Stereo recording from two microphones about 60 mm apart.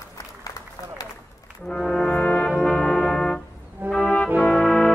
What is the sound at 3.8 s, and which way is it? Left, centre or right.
Brass instrument, right.